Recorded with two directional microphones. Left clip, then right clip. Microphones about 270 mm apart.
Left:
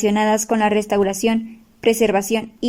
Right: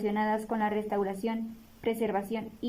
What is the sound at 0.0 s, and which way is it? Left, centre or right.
A woman's voice, left.